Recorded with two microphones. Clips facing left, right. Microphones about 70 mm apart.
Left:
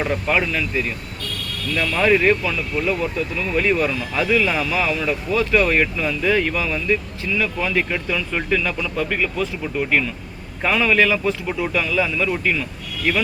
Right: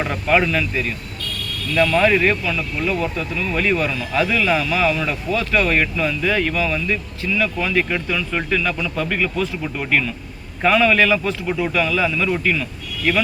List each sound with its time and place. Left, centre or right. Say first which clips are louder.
0.0 s speech: right 2 dB; centre